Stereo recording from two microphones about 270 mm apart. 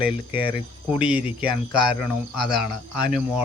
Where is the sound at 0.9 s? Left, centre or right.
Centre.